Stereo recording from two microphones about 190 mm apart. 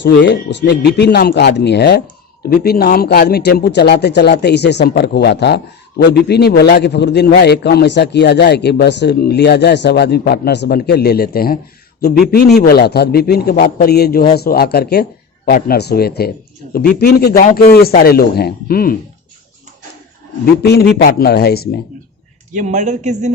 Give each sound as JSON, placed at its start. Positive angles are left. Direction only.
{"t": 0.0, "sound": "a man's voice", "side_deg": 70}
{"t": 20.4, "sound": "a man's voice", "side_deg": 55}
{"t": 22.5, "sound": "a man's voice", "side_deg": -40}